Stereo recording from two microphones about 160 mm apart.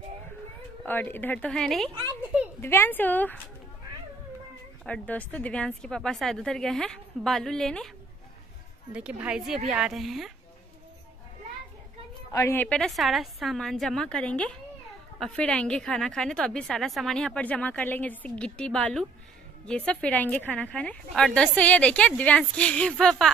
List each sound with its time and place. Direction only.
0.8 s speech: 10° left (ahead or behind)
2.6 s speech: 15° left (ahead or behind)
4.8 s a woman's voice: 10° left (ahead or behind)
8.9 s a woman's voice: 5° right (ahead or behind)
12.3 s a woman's voice: 20° left (ahead or behind)